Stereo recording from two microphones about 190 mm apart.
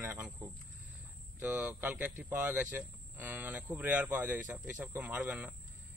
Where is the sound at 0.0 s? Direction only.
10° right (ahead or behind).